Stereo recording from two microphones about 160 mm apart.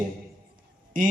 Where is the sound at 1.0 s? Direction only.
55° right (ahead or behind).